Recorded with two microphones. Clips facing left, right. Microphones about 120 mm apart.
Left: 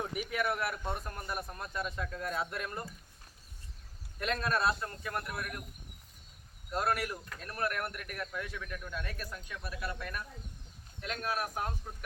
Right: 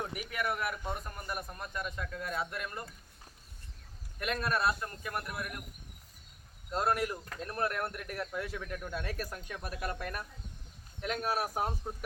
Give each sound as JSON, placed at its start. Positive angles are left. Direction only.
{"t": 0.0, "sound": "a man's voice", "side_deg": 0}
{"t": 4.2, "sound": "a man's voice", "side_deg": -5}
{"t": 6.7, "sound": "speech", "side_deg": -20}